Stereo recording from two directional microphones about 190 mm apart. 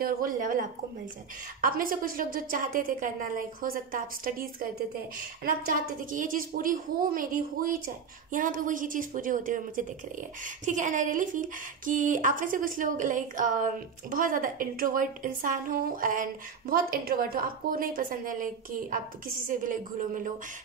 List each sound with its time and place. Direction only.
0.0 s a woman's voice: 45° right (ahead or behind)